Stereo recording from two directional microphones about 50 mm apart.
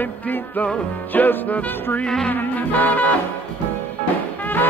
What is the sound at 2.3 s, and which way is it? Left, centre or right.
Music, left.